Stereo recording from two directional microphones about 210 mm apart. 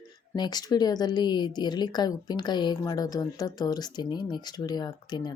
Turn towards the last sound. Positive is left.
turn(degrees=20)  # may be behind; listen again after turning